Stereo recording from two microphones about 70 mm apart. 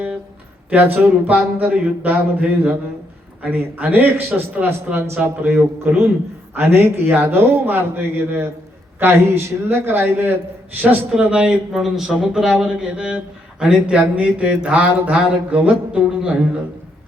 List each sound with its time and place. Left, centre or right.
0.7 s a man's voice: right
11.1 s speech: centre